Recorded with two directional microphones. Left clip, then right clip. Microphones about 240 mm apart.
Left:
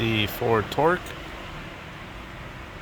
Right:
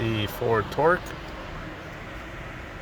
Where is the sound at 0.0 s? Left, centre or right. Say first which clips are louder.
Left 3 dB; centre.